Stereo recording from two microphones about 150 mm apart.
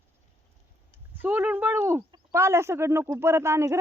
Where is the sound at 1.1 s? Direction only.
10° right (ahead or behind).